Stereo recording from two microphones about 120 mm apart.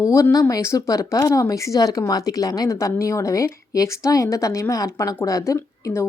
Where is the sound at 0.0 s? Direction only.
25° left (ahead or behind).